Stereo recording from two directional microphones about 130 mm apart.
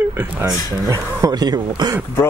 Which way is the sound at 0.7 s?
25° right (ahead or behind).